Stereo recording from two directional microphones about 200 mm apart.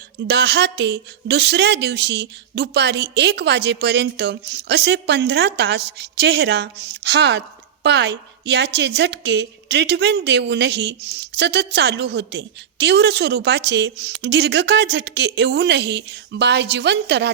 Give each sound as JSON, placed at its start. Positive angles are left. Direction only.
{"t": 0.3, "sound": "a woman's voice", "side_deg": -55}